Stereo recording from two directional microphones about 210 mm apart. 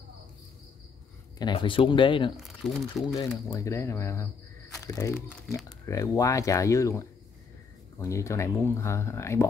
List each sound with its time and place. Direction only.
1.4 s speech: 20° left (ahead or behind)
2.3 s speech: centre (ahead or behind)
3.2 s speech: 15° left (ahead or behind)